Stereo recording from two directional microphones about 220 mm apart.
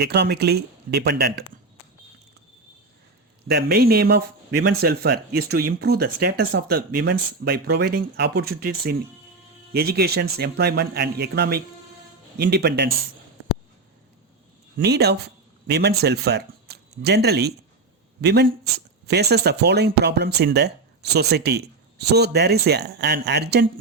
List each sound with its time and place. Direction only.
0.0 s speech: 50° right (ahead or behind)
3.4 s speech: 45° right (ahead or behind)
14.8 s speech: 50° right (ahead or behind)